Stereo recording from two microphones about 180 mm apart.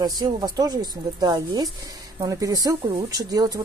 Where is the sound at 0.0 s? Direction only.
20° right (ahead or behind).